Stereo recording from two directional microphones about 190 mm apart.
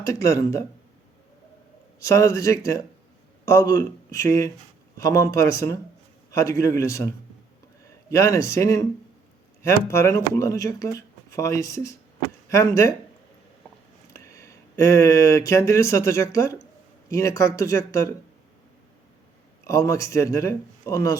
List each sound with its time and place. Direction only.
0.0 s speech: 15° left (ahead or behind)
2.0 s speech: 15° left (ahead or behind)
8.1 s speech: 15° left (ahead or behind)
14.1 s speech: 15° left (ahead or behind)
19.6 s speech: 15° left (ahead or behind)